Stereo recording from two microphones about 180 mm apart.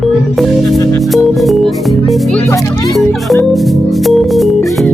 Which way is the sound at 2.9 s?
Centre (ahead or behind).